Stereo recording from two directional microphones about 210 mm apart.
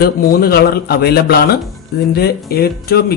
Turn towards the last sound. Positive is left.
turn(degrees=45)  # may be behind; listen again after turning